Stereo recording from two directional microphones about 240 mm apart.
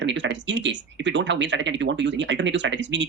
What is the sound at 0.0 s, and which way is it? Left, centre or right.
Speech, right.